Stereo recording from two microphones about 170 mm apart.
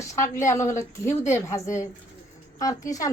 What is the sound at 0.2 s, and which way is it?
A woman's voice, 15° left (ahead or behind).